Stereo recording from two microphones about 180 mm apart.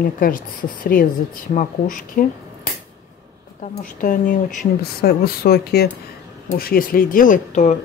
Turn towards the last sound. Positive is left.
turn(degrees=40)  # may be behind; listen again after turning